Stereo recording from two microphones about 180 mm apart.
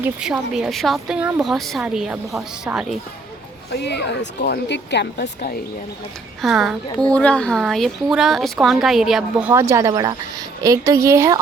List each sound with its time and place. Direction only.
0.0 s speech: 5° right (ahead or behind)
3.8 s a woman's voice: 70° left (ahead or behind)
6.4 s speech: centre (ahead or behind)
9.5 s a woman's voice: 15° right (ahead or behind)